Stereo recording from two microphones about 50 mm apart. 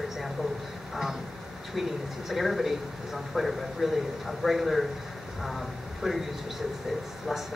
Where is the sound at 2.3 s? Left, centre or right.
Centre.